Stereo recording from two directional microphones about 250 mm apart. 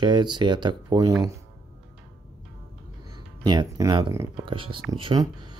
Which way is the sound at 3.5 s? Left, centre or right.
Centre.